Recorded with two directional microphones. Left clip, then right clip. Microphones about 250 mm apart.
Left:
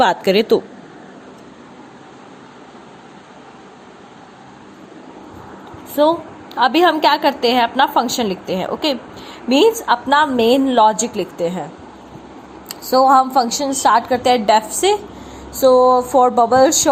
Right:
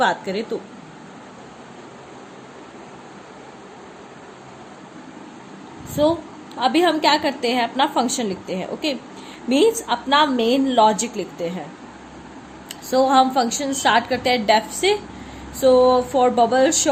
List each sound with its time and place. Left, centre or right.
0.0 s speech: left
6.0 s a woman's voice: centre
13.1 s a woman's voice: centre
14.1 s a woman's voice: centre